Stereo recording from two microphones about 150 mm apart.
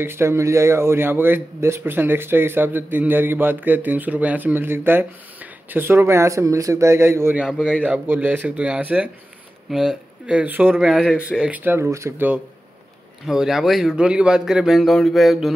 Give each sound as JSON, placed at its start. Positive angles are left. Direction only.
{"t": 0.0, "sound": "a man's voice", "side_deg": -15}
{"t": 7.3, "sound": "a man's voice", "side_deg": -5}
{"t": 13.3, "sound": "speech", "side_deg": -5}